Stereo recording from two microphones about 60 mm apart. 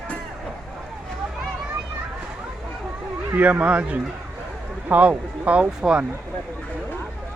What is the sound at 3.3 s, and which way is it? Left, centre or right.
Speech, right.